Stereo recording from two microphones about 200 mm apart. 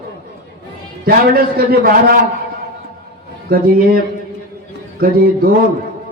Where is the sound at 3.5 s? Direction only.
45° right (ahead or behind).